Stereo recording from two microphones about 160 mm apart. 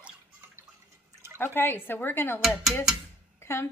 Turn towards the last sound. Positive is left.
turn(degrees=15)  # may be behind; listen again after turning